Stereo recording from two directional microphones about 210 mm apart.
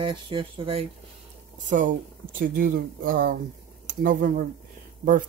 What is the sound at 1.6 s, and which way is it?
Speech, 40° right (ahead or behind).